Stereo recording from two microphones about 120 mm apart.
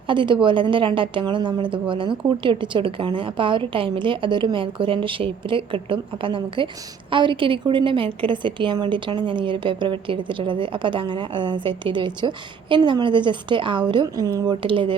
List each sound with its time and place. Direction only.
0.1 s a woman's voice: 45° right (ahead or behind)